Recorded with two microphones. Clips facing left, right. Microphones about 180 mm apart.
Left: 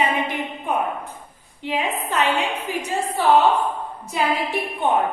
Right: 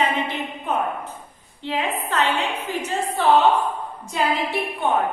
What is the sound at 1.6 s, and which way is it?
A woman's voice, 15° left (ahead or behind).